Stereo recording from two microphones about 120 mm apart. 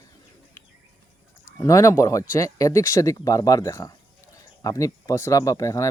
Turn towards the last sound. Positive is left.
turn(degrees=25)  # may be behind; listen again after turning